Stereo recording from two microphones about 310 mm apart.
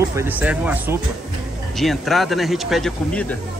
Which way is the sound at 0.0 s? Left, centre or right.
Centre.